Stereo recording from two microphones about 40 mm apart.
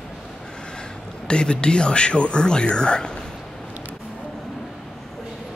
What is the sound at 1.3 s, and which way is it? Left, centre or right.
Speech, left.